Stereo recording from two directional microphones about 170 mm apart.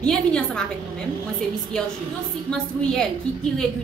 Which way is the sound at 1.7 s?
5° left (ahead or behind).